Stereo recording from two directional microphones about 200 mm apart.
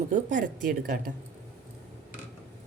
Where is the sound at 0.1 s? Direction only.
40° right (ahead or behind).